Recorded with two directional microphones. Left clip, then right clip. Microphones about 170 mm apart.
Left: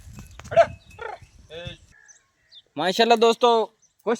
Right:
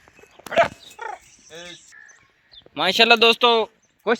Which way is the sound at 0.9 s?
50° left (ahead or behind).